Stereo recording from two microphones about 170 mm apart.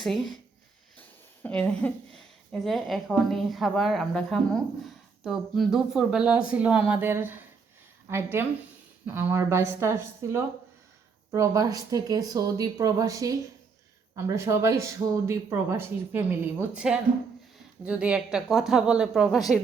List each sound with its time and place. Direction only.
0.0 s a woman's voice: centre (ahead or behind)